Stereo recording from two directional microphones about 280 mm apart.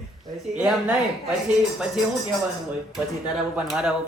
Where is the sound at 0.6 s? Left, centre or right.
Centre.